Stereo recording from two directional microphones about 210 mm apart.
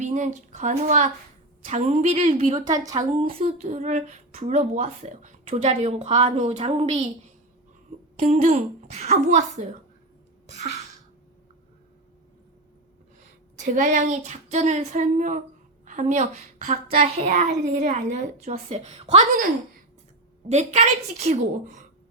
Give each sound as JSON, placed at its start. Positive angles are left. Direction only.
{"t": 0.0, "sound": "speech", "side_deg": -35}
{"t": 2.6, "sound": "a woman's voice", "side_deg": -15}
{"t": 3.1, "sound": "speech", "side_deg": -35}
{"t": 8.2, "sound": "speech", "side_deg": -35}
{"t": 13.7, "sound": "speech", "side_deg": -35}
{"t": 20.5, "sound": "speech", "side_deg": -30}